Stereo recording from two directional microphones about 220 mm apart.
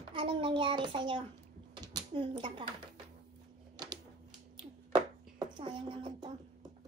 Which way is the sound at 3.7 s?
20° right (ahead or behind).